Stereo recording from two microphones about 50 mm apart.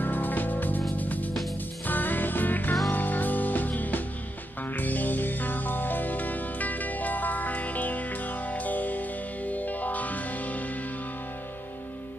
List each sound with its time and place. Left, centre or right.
0.0 s music: left